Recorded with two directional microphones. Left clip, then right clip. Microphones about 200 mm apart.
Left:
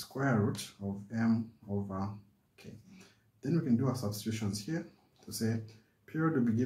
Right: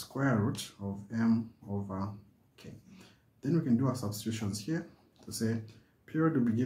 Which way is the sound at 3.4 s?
20° right (ahead or behind).